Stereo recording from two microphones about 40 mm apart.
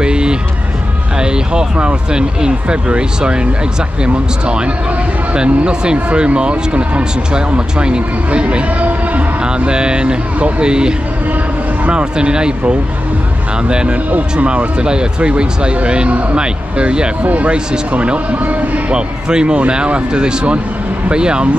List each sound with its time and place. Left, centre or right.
0.0 s music: right
1.2 s speech: right
17.2 s speech: right
18.9 s speech: right